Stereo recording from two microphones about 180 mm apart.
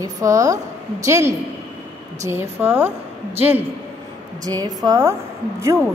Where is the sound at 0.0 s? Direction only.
15° right (ahead or behind).